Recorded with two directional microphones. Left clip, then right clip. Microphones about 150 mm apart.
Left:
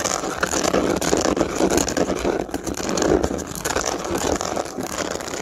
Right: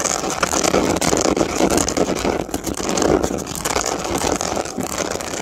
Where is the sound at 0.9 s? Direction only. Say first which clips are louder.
Right 3 dB; 30° right (ahead or behind).